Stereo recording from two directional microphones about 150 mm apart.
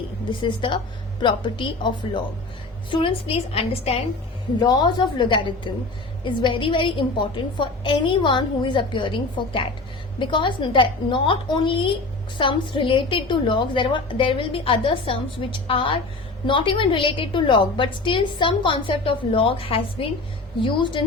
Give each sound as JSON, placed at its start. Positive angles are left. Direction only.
{"t": 0.3, "sound": "a woman's voice", "side_deg": 35}
{"t": 4.6, "sound": "a woman's voice", "side_deg": 30}